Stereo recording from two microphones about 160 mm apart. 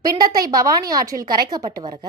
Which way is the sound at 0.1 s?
25° right (ahead or behind).